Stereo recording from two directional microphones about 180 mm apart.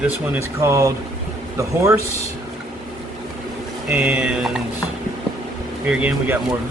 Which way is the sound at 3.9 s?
5° right (ahead or behind).